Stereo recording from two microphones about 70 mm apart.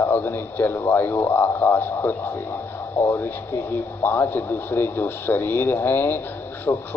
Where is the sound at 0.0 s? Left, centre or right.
Left.